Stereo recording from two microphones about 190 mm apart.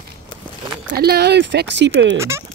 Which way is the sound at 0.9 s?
55° right (ahead or behind).